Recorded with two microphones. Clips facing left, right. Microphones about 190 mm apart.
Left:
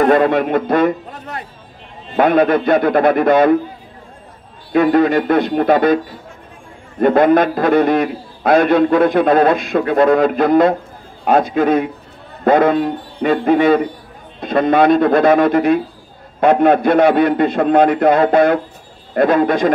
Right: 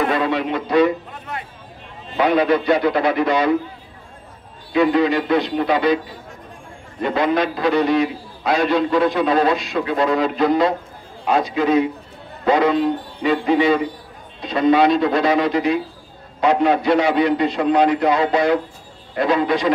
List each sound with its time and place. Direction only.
0.0 s a man's voice: 50° left (ahead or behind)
2.1 s a man's voice: 50° left (ahead or behind)
4.7 s a man's voice: 50° left (ahead or behind)
7.0 s a man's voice: 50° left (ahead or behind)